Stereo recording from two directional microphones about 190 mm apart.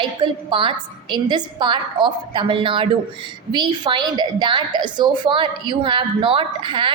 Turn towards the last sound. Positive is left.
turn(degrees=-25)  # may be behind; listen again after turning